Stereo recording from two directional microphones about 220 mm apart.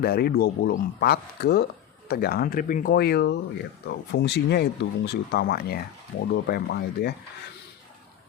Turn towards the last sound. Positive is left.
turn(degrees=45)  # may be behind; listen again after turning